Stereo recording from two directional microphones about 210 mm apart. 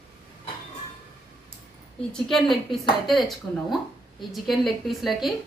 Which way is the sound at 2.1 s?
Centre (ahead or behind).